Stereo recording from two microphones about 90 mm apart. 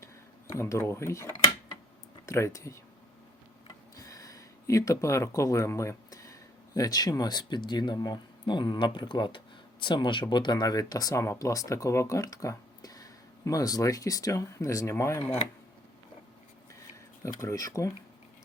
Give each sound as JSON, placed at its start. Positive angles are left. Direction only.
{"t": 0.5, "sound": "speech", "side_deg": 30}
{"t": 3.9, "sound": "a sound", "side_deg": 40}
{"t": 6.7, "sound": "speech", "side_deg": 45}
{"t": 17.2, "sound": "speech", "side_deg": 35}